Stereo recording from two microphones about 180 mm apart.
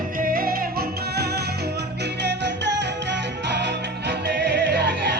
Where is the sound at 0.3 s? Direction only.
55° right (ahead or behind).